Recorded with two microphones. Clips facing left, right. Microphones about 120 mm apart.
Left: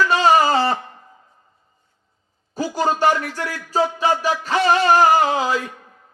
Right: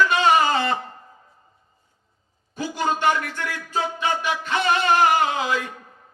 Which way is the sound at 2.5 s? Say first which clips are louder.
Left 4 dB; 35° left (ahead or behind).